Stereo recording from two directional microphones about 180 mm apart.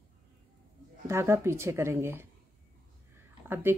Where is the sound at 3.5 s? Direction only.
10° right (ahead or behind).